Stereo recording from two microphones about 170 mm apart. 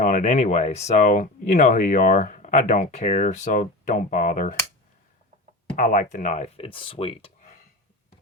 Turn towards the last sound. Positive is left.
turn(degrees=35)  # may be behind; listen again after turning